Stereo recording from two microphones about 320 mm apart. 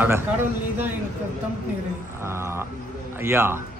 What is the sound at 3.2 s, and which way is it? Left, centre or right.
Speech, centre.